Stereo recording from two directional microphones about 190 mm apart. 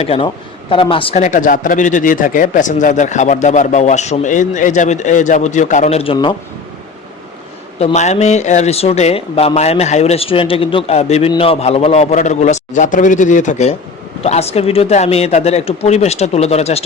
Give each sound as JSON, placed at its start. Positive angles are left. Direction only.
{"t": 0.0, "sound": "a man's voice", "side_deg": 30}
{"t": 7.8, "sound": "a man's voice", "side_deg": 35}